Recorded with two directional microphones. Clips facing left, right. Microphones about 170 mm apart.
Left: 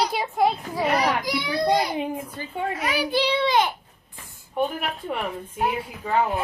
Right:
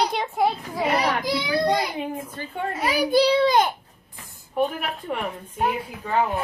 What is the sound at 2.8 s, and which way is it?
Speech, 40° right (ahead or behind).